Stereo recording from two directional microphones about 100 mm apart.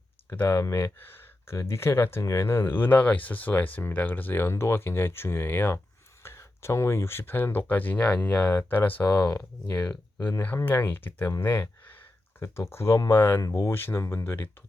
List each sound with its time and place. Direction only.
0.3 s speech: 25° left (ahead or behind)